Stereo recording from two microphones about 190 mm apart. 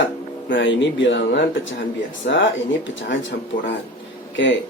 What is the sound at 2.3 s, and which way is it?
Speech, 55° left (ahead or behind).